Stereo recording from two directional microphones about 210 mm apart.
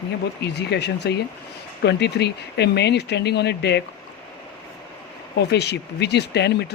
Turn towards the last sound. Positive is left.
turn(degrees=55)  # may be behind; listen again after turning